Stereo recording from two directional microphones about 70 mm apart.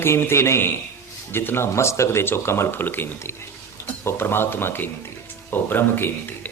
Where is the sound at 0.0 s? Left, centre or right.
Left.